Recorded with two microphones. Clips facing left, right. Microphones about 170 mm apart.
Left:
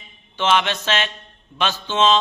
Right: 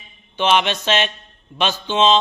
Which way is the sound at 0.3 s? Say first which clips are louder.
Right 2 dB; 20° right (ahead or behind).